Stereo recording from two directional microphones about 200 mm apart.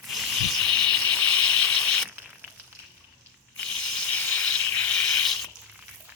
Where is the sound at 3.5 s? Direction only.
5° left (ahead or behind).